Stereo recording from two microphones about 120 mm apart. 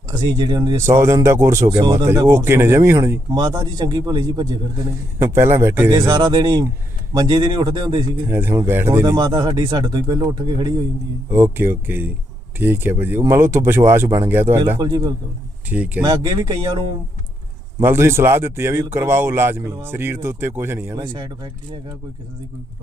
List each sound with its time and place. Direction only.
0.1 s speech: 35° right (ahead or behind)
0.9 s speech: 20° right (ahead or behind)
1.8 s speech: 35° right (ahead or behind)
2.0 s speech: 20° right (ahead or behind)
3.2 s speech: 35° right (ahead or behind)
5.2 s speech: 20° right (ahead or behind)
5.9 s speech: 35° right (ahead or behind)
8.3 s speech: 20° right (ahead or behind)
9.1 s speech: 35° right (ahead or behind)
11.3 s speech: 20° right (ahead or behind)
14.8 s speech: 35° right (ahead or behind)
15.7 s speech: 15° right (ahead or behind)
16.0 s speech: 35° right (ahead or behind)
17.8 s speech: 20° right (ahead or behind)